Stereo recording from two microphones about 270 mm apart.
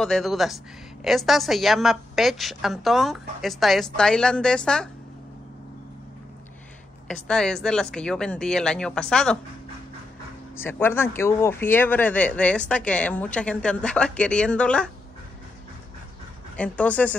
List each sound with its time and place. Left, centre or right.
0.0 s speech: centre
7.1 s speech: centre
10.5 s speech: centre
16.5 s speech: centre